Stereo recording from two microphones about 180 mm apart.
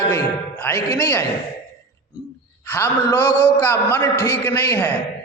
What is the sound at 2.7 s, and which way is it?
A man's voice, 10° left (ahead or behind).